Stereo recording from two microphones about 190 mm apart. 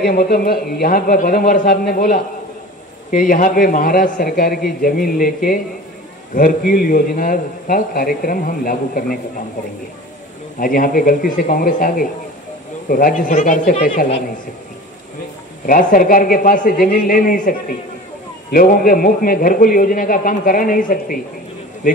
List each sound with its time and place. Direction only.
0.0 s a man's voice: 55° left (ahead or behind)
10.6 s a man's voice: 50° left (ahead or behind)
15.6 s a man's voice: 45° left (ahead or behind)